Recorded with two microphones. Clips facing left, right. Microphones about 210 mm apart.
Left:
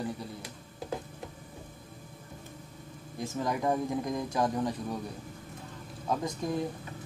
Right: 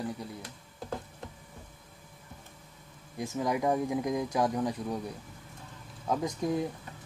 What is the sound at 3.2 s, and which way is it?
Speech, 15° right (ahead or behind).